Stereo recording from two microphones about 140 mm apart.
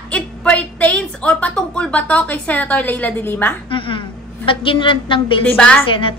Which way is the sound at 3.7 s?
40° left (ahead or behind).